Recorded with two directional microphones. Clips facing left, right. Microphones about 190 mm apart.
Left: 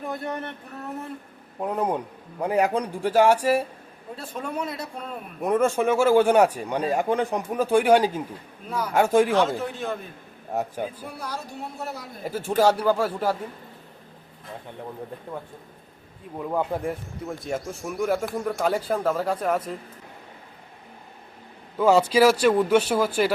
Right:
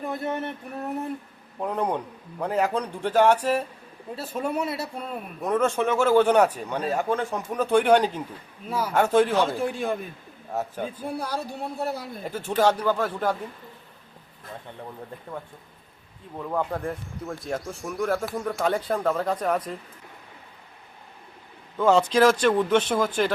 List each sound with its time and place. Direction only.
0.0 s speech: centre (ahead or behind); by 1.1 s 15° right (ahead or behind)
1.5 s speech: 5° left (ahead or behind)
4.1 s speech: 5° right (ahead or behind)
5.4 s speech: 10° left (ahead or behind)
9.6 s speech: 10° right (ahead or behind)
10.5 s speech: 15° left (ahead or behind)
11.8 s a man's voice: 30° right (ahead or behind)
12.2 s speech: 10° left (ahead or behind)
16.4 s speech: 10° left (ahead or behind)
21.8 s speech: 10° left (ahead or behind)